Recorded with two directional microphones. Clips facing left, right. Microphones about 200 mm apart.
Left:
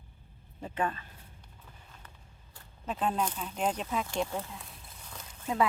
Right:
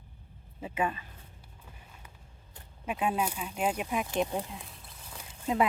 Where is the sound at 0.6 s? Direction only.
10° right (ahead or behind).